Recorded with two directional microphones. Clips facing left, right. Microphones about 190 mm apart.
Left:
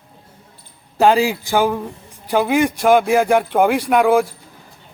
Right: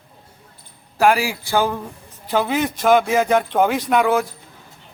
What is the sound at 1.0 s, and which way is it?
A man's voice, 25° left (ahead or behind).